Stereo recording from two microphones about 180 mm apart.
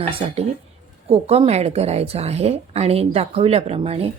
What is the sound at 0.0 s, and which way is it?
A woman's voice, 30° right (ahead or behind).